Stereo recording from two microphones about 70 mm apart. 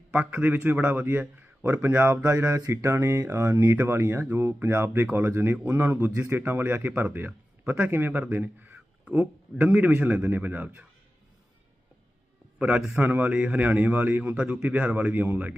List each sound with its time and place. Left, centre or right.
0.1 s a man's voice: centre
12.5 s a man's voice: centre